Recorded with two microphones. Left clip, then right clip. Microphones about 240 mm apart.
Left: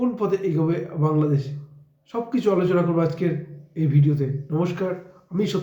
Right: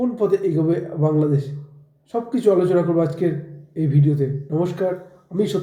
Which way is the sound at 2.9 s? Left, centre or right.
Centre.